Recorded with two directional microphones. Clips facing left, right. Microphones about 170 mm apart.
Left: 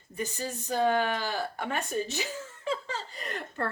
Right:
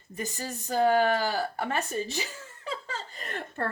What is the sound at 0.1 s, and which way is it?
Speech, 40° right (ahead or behind).